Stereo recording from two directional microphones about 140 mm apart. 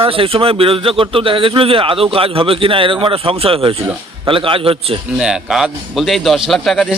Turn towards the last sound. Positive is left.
turn(degrees=0)  # may be behind; listen again after turning